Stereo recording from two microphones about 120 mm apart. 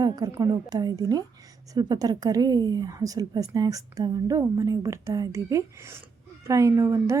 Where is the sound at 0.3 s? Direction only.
30° right (ahead or behind).